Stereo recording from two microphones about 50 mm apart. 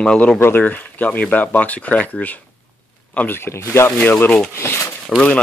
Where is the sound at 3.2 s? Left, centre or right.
Left.